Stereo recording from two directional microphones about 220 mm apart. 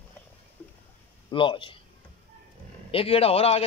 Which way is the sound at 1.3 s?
20° left (ahead or behind).